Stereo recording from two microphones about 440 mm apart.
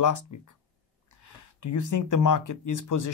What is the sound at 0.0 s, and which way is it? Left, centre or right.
Speech, left.